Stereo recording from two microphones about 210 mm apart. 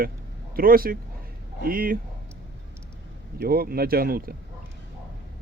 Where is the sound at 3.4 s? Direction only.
45° right (ahead or behind).